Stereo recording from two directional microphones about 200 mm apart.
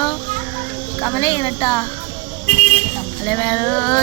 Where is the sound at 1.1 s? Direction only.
20° left (ahead or behind).